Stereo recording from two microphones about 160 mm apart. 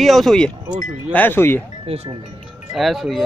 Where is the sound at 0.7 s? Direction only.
50° right (ahead or behind).